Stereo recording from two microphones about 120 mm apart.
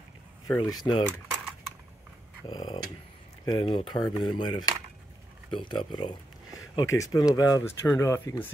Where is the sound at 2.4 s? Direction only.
35° left (ahead or behind).